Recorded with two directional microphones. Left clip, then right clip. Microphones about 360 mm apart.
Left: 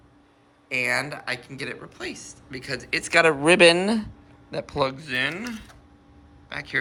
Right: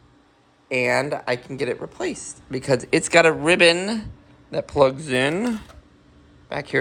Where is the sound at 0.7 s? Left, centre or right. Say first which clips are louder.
Right 4 dB; centre.